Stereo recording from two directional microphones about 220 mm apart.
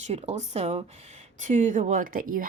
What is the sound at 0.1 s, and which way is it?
Speech, 30° right (ahead or behind).